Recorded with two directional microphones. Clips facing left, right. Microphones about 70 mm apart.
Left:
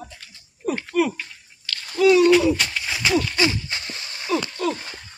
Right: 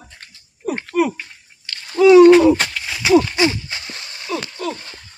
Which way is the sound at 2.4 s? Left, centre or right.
Right.